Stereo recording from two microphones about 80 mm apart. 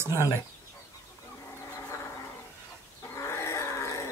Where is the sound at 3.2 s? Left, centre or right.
Left.